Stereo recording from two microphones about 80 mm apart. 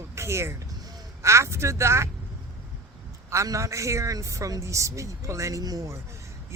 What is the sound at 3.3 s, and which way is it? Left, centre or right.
A woman's voice, right.